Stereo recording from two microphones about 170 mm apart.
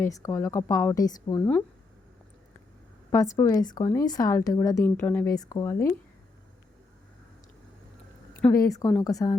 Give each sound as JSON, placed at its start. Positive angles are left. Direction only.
{"t": 0.0, "sound": "speech", "side_deg": 20}
{"t": 3.1, "sound": "a woman's voice", "side_deg": 20}
{"t": 8.5, "sound": "a woman's voice", "side_deg": 20}